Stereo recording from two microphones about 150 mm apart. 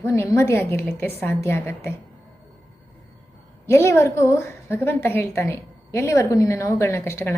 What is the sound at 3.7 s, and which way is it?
A woman's voice, 15° left (ahead or behind).